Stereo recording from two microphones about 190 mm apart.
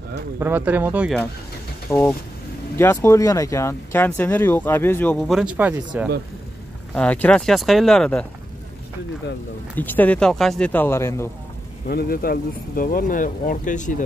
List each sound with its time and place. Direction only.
0.4 s speech: 10° right (ahead or behind)
1.9 s speech: 10° left (ahead or behind); by 5.8 s 5° right (ahead or behind)
6.9 s speech: 5° left (ahead or behind)
9.8 s speech: 10° left (ahead or behind)
11.9 s speech: 50° left (ahead or behind)